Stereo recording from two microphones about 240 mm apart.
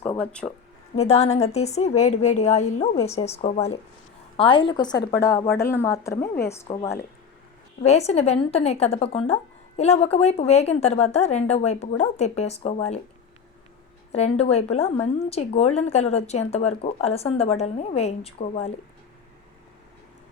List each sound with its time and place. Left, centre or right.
0.2 s speech: centre
0.9 s a woman's voice: left; by 6.7 s centre
7.9 s speech: left
14.1 s speech: left